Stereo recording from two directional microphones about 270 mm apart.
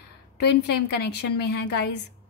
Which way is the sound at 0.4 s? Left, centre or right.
Left.